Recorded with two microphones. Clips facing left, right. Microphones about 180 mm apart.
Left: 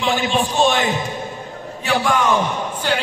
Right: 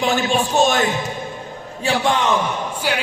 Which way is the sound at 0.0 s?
45° right (ahead or behind).